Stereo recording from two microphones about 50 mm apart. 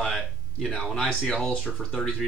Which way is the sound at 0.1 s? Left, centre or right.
Centre.